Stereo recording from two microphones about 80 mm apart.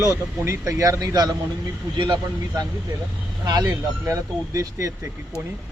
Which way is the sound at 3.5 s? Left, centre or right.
Right.